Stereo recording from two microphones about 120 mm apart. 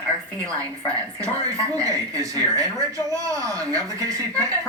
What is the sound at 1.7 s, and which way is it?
Speech, 25° right (ahead or behind).